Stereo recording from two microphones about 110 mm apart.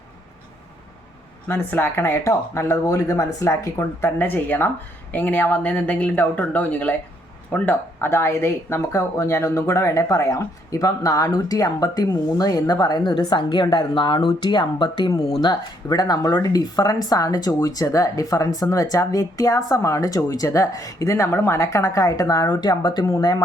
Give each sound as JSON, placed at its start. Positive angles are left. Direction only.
{"t": 1.5, "sound": "speech", "side_deg": 20}